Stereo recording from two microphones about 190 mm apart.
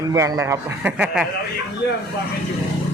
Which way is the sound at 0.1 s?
15° right (ahead or behind).